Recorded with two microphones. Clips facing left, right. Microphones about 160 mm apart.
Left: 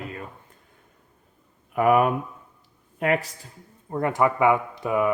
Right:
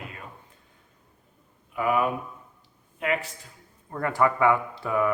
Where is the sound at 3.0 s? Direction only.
45° left (ahead or behind).